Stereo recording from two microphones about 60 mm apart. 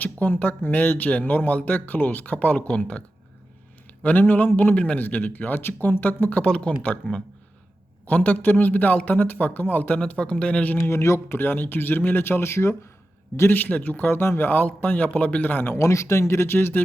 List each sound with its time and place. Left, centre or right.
0.0 s a man's voice: left
4.0 s a man's voice: left
8.0 s speech: left
10.8 s speech: left
11.3 s a man's voice: left
12.4 s speech: left
13.5 s a man's voice: left
15.7 s speech: left